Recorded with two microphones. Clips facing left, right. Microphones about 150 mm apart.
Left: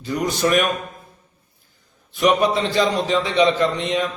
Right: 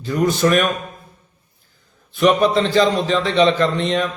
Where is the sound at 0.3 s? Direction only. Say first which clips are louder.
Right 2 dB; 15° left (ahead or behind).